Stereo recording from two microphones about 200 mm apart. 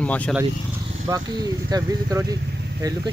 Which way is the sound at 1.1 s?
20° right (ahead or behind).